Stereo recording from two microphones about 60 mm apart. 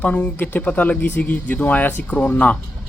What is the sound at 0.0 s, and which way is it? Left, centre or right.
Speech, left.